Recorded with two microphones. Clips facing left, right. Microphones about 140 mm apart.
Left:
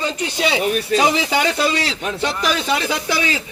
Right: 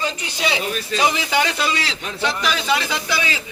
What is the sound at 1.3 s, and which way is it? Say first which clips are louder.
A man's voice: left 2 dB; 40° left (ahead or behind).